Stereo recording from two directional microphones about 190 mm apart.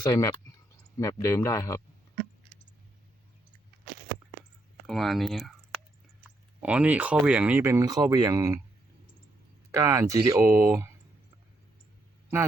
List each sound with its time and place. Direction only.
0.0 s speech: 20° left (ahead or behind)
4.9 s speech: centre (ahead or behind)
6.6 s speech: 5° right (ahead or behind)
9.7 s speech: 15° right (ahead or behind)